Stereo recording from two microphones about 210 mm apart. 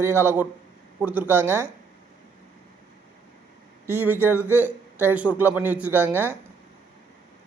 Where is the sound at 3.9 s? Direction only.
10° right (ahead or behind).